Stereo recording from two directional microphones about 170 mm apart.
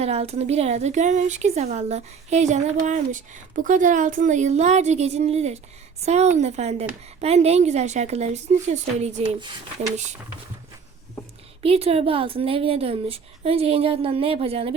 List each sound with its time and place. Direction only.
0.0 s a woman's voice: 40° right (ahead or behind)
11.6 s a woman's voice: 35° right (ahead or behind)